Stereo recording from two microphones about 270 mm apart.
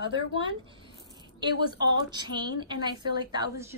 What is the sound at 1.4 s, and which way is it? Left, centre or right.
A woman's voice, centre.